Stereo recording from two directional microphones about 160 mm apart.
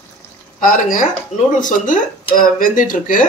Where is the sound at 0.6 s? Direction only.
60° left (ahead or behind).